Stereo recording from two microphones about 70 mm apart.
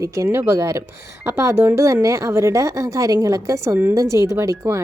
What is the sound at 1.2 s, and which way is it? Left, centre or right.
Speech, right.